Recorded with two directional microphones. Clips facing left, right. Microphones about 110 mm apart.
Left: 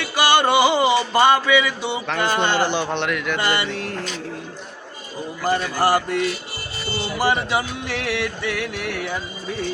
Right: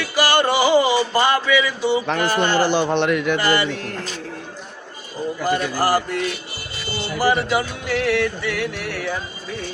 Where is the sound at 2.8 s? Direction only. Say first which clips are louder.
Right 5 dB; 15° right (ahead or behind).